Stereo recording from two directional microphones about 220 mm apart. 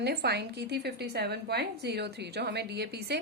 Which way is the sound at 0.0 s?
45° right (ahead or behind).